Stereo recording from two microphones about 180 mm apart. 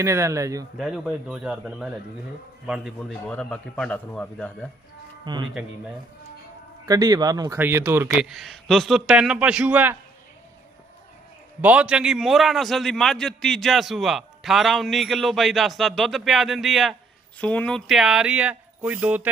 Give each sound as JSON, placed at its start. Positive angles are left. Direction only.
{"t": 0.0, "sound": "speech", "side_deg": -15}
{"t": 0.8, "sound": "a man's voice", "side_deg": -5}
{"t": 5.2, "sound": "speech", "side_deg": -25}
{"t": 6.8, "sound": "speech", "side_deg": -20}
{"t": 8.2, "sound": "a man's voice", "side_deg": 0}
{"t": 11.6, "sound": "a man's voice", "side_deg": -5}